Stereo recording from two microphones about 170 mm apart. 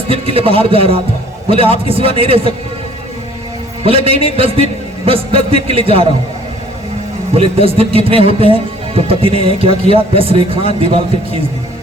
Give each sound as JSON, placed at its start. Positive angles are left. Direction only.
{"t": 0.1, "sound": "a man's voice", "side_deg": -35}
{"t": 3.8, "sound": "a man's voice", "side_deg": -35}
{"t": 7.3, "sound": "a man's voice", "side_deg": -35}